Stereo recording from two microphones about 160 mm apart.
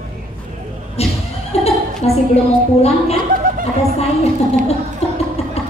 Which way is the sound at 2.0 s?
40° left (ahead or behind).